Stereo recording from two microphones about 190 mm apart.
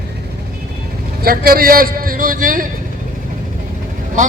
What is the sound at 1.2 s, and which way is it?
A man's voice, 50° right (ahead or behind).